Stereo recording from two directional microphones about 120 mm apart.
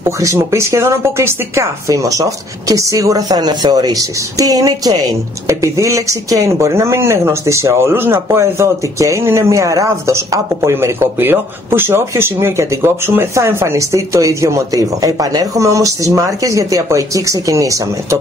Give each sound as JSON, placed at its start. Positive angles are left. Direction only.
{"t": 0.0, "sound": "speech", "side_deg": -25}